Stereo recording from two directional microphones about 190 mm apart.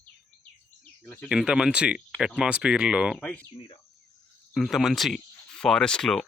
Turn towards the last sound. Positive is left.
turn(degrees=5)  # may be behind; listen again after turning